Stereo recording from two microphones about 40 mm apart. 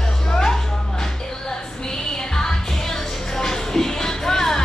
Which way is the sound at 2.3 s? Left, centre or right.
Centre.